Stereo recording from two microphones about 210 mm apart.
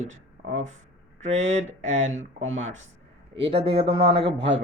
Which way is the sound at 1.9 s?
35° right (ahead or behind).